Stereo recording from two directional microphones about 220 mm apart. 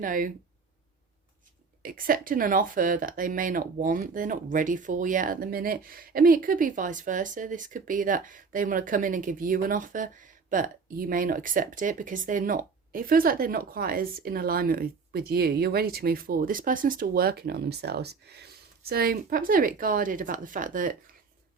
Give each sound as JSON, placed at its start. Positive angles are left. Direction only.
{"t": 0.0, "sound": "speech", "side_deg": -40}
{"t": 1.8, "sound": "speech", "side_deg": -40}